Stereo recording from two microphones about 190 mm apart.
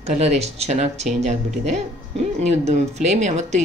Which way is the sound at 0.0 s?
35° right (ahead or behind).